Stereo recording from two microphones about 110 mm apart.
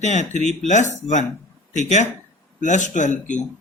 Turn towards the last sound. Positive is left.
turn(degrees=90)